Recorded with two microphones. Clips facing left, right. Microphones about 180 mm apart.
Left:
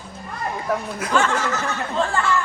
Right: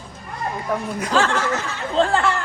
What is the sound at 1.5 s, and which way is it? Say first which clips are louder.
Speech: right 1 dB; 30° right (ahead or behind).